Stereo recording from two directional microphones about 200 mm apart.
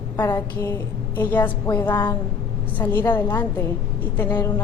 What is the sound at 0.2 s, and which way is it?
A woman's voice, 15° left (ahead or behind).